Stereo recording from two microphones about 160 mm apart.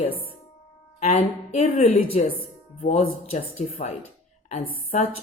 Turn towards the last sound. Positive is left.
turn(degrees=50)  # may be behind; listen again after turning